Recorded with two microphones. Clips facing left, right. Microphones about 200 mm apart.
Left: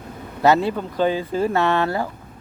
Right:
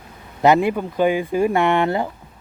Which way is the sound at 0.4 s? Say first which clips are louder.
Right 2 dB; 15° right (ahead or behind).